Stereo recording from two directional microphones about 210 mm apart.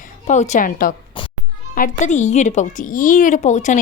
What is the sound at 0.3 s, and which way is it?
Speech, 35° left (ahead or behind).